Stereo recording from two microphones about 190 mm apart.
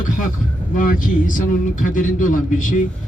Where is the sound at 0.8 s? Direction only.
45° left (ahead or behind).